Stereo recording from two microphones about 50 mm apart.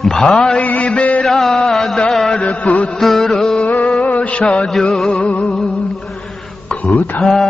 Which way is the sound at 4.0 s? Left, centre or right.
Left.